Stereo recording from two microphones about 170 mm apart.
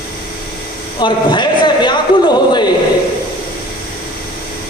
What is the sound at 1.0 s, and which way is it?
Speech, 25° left (ahead or behind).